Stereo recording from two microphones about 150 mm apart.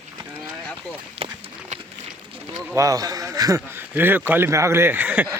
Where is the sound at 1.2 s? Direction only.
40° right (ahead or behind).